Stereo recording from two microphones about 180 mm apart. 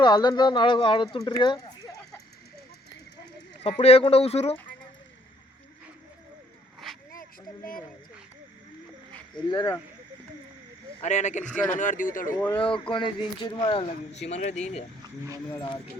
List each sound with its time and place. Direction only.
0.0 s speech: 25° left (ahead or behind)
3.6 s speech: 35° left (ahead or behind)
7.1 s a sound: 50° left (ahead or behind)
9.5 s speech: 20° left (ahead or behind)
11.0 s speech: 40° left (ahead or behind)
12.5 s speech: 30° left (ahead or behind)